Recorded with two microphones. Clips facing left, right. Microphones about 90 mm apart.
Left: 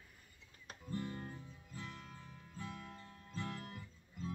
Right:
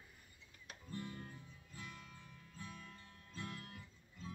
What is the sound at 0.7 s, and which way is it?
Guitar, 35° left (ahead or behind).